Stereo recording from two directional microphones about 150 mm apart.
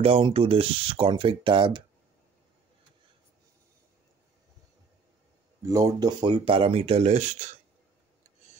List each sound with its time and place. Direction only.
0.0 s speech: 40° right (ahead or behind)
5.6 s speech: 20° right (ahead or behind); by 7.5 s 50° right (ahead or behind)